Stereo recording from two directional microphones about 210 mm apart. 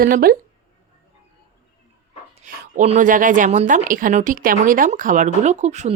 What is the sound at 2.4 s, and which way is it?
A woman's voice, 35° right (ahead or behind).